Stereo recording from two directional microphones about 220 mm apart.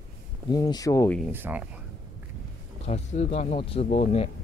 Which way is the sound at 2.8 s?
30° left (ahead or behind).